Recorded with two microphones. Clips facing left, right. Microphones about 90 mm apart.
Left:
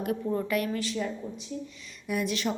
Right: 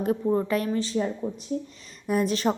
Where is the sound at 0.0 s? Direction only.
30° right (ahead or behind).